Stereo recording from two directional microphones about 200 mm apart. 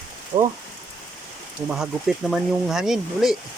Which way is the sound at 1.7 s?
Centre (ahead or behind).